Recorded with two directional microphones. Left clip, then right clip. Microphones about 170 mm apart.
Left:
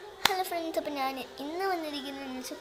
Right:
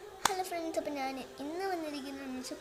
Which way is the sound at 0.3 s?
15° right (ahead or behind).